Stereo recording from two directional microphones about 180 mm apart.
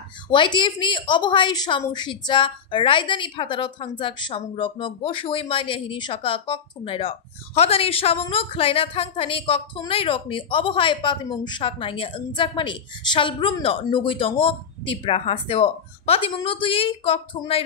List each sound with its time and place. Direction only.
0.3 s speech: 25° left (ahead or behind)